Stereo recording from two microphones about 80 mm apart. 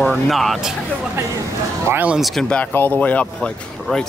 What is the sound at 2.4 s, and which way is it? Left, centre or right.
Speech, left.